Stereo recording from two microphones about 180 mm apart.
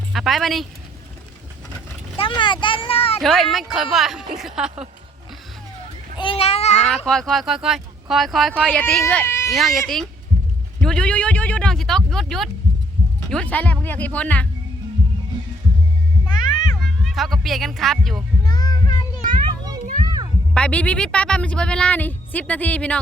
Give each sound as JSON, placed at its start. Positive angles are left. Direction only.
{"t": 0.1, "sound": "speech", "side_deg": 0}
{"t": 2.1, "sound": "speech", "side_deg": 25}
{"t": 3.2, "sound": "speech", "side_deg": 0}
{"t": 6.1, "sound": "children playing", "side_deg": 30}
{"t": 6.8, "sound": "speech", "side_deg": 5}
{"t": 8.7, "sound": "speech", "side_deg": 10}
{"t": 9.5, "sound": "speech", "side_deg": 0}
{"t": 10.8, "sound": "a sound", "side_deg": 5}
{"t": 13.3, "sound": "speech", "side_deg": 10}
{"t": 16.2, "sound": "music", "side_deg": 0}
{"t": 18.4, "sound": "child singing", "side_deg": 20}
{"t": 20.5, "sound": "speech", "side_deg": 5}